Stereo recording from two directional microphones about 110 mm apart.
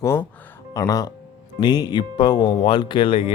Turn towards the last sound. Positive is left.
turn(degrees=55)  # may be behind; listen again after turning